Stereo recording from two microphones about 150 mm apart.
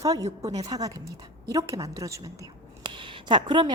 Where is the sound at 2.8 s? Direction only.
35° right (ahead or behind).